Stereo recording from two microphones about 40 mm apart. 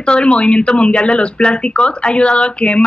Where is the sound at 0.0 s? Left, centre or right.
Left.